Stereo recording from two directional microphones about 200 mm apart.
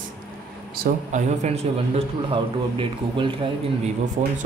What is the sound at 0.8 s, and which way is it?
A man's voice, 35° right (ahead or behind).